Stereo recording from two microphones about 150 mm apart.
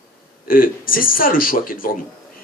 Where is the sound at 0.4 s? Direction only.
70° left (ahead or behind).